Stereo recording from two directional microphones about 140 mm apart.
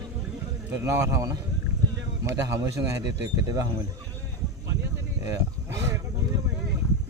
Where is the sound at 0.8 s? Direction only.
20° right (ahead or behind).